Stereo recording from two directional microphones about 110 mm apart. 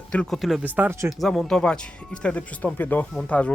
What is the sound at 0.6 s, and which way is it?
Speech, 15° right (ahead or behind).